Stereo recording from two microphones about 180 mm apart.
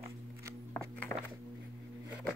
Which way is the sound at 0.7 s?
10° left (ahead or behind).